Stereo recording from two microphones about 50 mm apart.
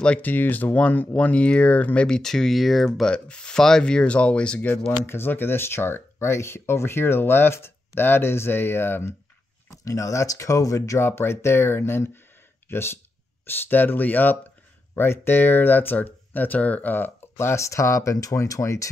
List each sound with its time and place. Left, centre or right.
0.2 s speech: left
2.0 s speech: centre
3.1 s speech: centre
4.6 s speech: left
5.0 s speech: left
9.7 s speech: left
13.5 s speech: left
15.0 s speech: left
16.9 s speech: left
17.4 s speech: left